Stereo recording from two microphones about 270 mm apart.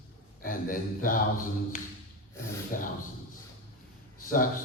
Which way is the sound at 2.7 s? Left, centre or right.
Left.